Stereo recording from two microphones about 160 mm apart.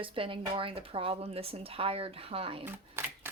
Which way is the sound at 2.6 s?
15° right (ahead or behind).